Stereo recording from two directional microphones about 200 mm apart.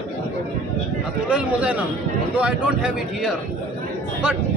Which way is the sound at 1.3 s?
5° right (ahead or behind).